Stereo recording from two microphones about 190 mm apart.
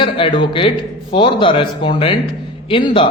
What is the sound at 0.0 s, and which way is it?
A man's voice, 25° left (ahead or behind).